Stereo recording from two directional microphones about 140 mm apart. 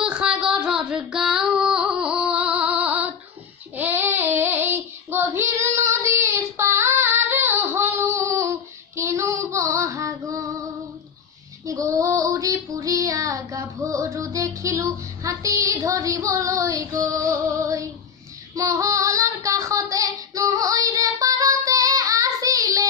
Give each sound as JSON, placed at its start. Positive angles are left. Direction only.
{"t": 0.0, "sound": "a sound", "side_deg": -5}
{"t": 2.6, "sound": "music", "side_deg": -10}
{"t": 3.7, "sound": "child singing", "side_deg": -15}
{"t": 8.9, "sound": "female singing", "side_deg": -20}
{"t": 11.6, "sound": "female singing", "side_deg": -25}
{"t": 18.5, "sound": "child singing", "side_deg": -25}